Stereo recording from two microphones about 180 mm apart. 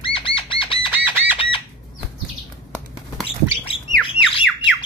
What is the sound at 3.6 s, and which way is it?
Squawk, 30° left (ahead or behind).